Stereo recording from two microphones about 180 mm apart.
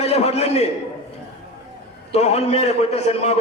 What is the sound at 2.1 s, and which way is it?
A man's voice, 35° left (ahead or behind).